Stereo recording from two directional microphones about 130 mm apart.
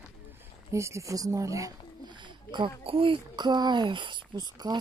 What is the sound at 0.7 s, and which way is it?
Speech, 20° right (ahead or behind).